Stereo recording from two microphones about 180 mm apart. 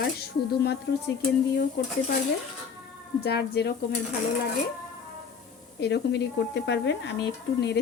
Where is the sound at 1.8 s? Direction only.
65° left (ahead or behind).